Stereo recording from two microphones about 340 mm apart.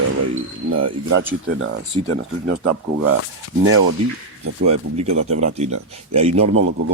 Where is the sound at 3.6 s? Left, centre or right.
Right.